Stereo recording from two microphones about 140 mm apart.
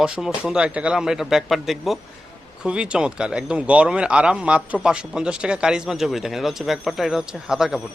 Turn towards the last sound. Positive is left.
turn(degrees=-5)  # may be behind; listen again after turning